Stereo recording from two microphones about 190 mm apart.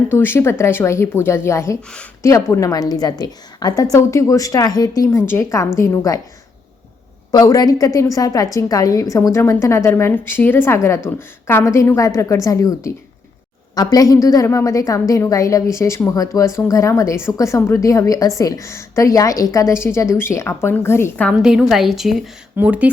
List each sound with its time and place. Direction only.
0.1 s a woman's voice: 10° left (ahead or behind)
7.3 s a woman's voice: 20° left (ahead or behind)
21.4 s a woman's voice: centre (ahead or behind)